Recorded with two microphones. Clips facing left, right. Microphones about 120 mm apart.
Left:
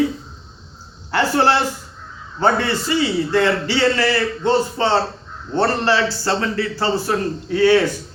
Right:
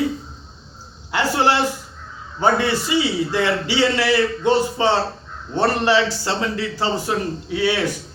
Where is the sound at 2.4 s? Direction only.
10° right (ahead or behind).